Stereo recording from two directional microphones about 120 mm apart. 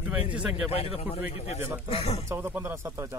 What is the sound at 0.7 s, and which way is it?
A man's voice, 55° left (ahead or behind).